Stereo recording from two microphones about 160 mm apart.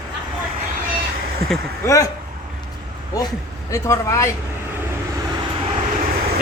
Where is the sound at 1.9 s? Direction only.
20° left (ahead or behind).